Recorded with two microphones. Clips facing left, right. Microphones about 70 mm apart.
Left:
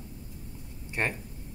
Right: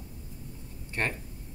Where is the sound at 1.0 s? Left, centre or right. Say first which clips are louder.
Left 1 dB; centre.